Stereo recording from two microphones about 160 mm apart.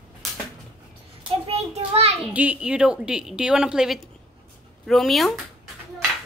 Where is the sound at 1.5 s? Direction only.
40° right (ahead or behind).